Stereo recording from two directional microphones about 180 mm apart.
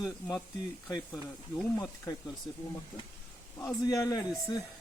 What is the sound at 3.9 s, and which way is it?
Speech, 20° left (ahead or behind).